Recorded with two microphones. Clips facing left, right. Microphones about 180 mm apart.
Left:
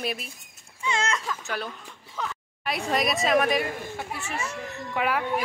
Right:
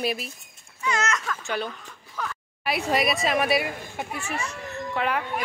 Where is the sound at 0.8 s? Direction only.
30° left (ahead or behind).